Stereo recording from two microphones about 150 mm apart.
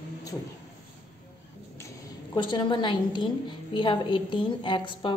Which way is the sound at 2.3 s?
30° left (ahead or behind).